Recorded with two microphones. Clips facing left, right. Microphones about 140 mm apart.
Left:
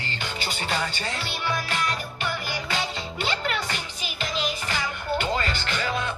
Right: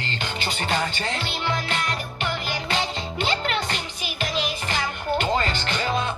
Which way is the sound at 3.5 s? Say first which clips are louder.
Right 3 dB; 25° right (ahead or behind).